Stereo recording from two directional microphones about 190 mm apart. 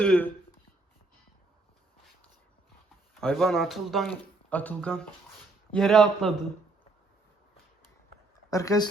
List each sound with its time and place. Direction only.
0.0 s speech: 5° left (ahead or behind)
3.2 s a man's voice: 5° left (ahead or behind)
8.4 s speech: 15° left (ahead or behind)